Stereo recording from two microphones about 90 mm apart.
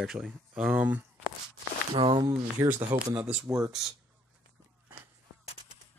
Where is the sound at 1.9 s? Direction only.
70° right (ahead or behind).